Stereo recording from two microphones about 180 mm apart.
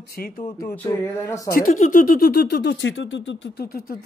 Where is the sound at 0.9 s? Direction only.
15° left (ahead or behind).